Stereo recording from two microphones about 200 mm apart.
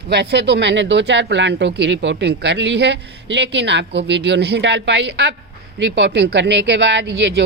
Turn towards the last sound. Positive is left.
turn(degrees=-60)  # may be behind; listen again after turning